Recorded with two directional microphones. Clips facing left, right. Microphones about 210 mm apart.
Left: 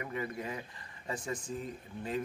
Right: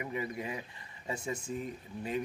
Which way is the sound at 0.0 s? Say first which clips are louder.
Right 1 dB; 15° right (ahead or behind).